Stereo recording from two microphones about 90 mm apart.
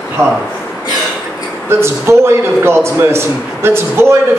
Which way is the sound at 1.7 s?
30° right (ahead or behind).